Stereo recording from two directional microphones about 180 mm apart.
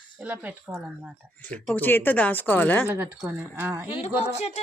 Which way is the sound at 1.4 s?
10° left (ahead or behind).